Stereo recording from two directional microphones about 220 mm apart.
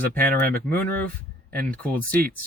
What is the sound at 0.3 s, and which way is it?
Speech, 40° right (ahead or behind).